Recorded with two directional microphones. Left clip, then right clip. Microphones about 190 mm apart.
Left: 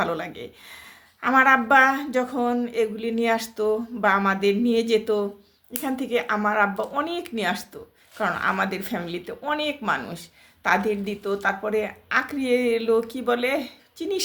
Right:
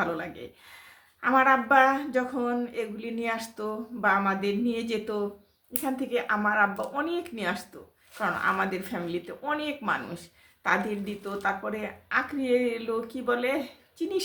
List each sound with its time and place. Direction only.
0.0 s speech: 45° left (ahead or behind)